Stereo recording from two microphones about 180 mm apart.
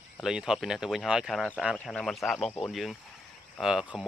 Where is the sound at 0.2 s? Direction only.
5° right (ahead or behind).